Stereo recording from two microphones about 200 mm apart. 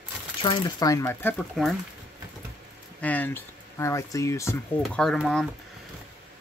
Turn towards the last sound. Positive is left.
turn(degrees=0)  # may be behind; listen again after turning